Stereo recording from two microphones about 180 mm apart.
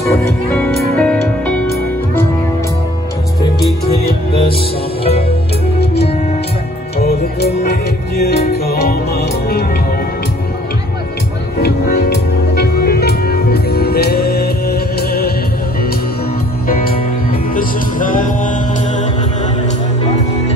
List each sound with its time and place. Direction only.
0.0 s music: 15° left (ahead or behind)
0.7 s music: 5° left (ahead or behind)
5.8 s music: 35° left (ahead or behind)
7.0 s music: 60° left (ahead or behind)
12.1 s music: 60° left (ahead or behind)
16.6 s music: 55° left (ahead or behind)